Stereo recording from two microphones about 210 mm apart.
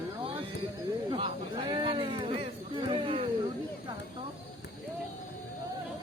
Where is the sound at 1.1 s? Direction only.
25° right (ahead or behind).